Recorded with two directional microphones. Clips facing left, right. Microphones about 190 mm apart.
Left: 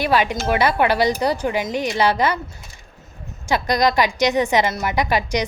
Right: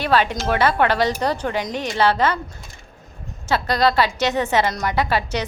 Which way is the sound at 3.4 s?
15° left (ahead or behind).